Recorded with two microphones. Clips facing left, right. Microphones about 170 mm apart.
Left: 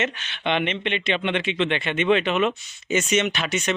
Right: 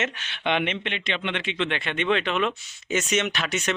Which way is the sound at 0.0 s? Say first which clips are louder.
Left 2 dB; 10° right (ahead or behind).